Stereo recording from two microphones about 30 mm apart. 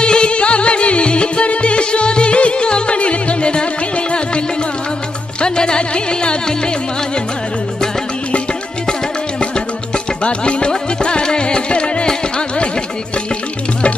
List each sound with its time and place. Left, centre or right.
0.0 s music: left
5.4 s music: left
10.2 s music: left